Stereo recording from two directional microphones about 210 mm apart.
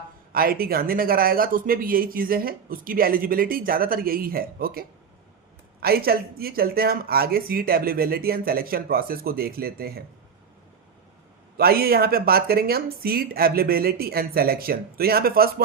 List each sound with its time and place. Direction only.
0.3 s speech: 45° right (ahead or behind)
11.5 s speech: 45° right (ahead or behind)